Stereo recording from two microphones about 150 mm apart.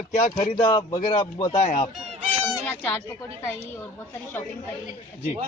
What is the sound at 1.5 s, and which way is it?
Speech, 45° left (ahead or behind).